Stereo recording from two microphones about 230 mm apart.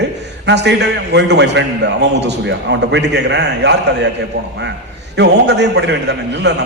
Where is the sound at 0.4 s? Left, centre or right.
Right.